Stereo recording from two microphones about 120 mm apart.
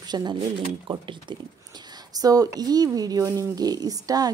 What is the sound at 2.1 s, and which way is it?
Speech, 30° right (ahead or behind).